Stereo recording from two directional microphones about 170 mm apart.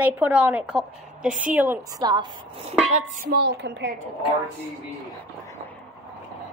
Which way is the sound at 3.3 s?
75° right (ahead or behind).